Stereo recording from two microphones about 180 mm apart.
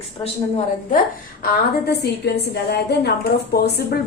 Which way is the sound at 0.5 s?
45° left (ahead or behind).